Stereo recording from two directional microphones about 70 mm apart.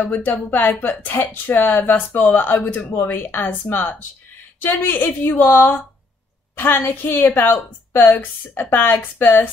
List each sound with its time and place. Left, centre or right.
0.0 s a woman's voice: left